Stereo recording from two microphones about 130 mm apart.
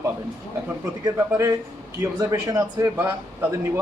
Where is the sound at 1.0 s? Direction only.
25° right (ahead or behind).